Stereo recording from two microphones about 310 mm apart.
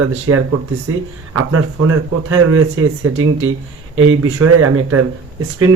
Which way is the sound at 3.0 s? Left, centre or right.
Right.